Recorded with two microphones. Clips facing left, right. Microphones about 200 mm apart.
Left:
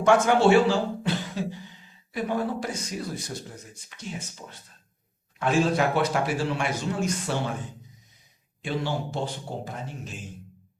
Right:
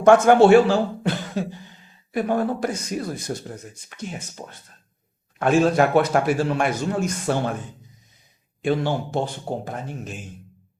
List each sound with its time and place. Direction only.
0.0 s speech: 55° right (ahead or behind)
8.6 s speech: 55° right (ahead or behind)